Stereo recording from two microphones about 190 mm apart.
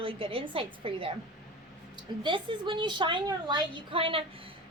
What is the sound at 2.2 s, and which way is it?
A woman's voice, 25° right (ahead or behind).